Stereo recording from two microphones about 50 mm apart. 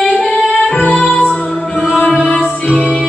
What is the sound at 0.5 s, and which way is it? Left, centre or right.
Music, left.